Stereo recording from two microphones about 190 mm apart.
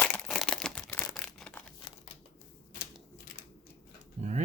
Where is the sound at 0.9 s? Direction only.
15° left (ahead or behind).